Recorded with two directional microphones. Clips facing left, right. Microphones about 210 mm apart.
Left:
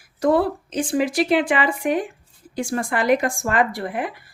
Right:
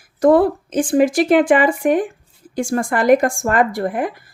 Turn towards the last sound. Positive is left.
turn(degrees=-45)  # may be behind; listen again after turning